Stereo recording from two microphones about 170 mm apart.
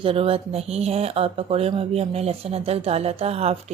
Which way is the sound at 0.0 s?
35° right (ahead or behind).